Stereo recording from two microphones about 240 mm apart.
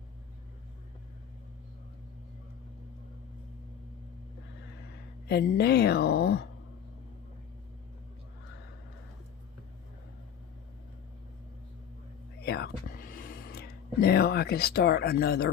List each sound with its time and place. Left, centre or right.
5.3 s speech: left
12.4 s whispering: left